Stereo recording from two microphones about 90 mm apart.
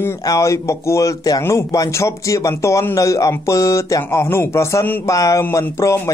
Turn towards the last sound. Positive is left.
turn(degrees=30)  # may be behind; listen again after turning